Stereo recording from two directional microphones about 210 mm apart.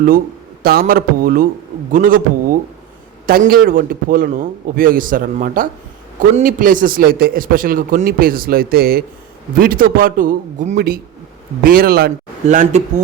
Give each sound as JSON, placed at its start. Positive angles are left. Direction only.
{"t": 0.6, "sound": "a man's voice", "side_deg": -45}